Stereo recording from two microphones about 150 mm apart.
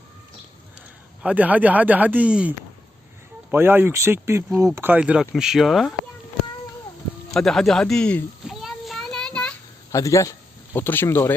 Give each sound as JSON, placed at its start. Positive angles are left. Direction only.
{"t": 1.2, "sound": "speech", "side_deg": -10}
{"t": 7.3, "sound": "a sound", "side_deg": 0}
{"t": 9.9, "sound": "a man's voice", "side_deg": 20}